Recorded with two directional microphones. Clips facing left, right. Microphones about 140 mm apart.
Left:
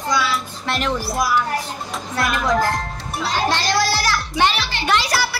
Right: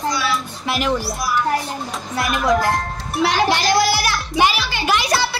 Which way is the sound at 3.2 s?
85° right.